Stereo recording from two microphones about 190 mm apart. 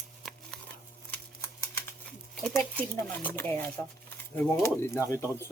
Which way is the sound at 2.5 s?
10° left (ahead or behind).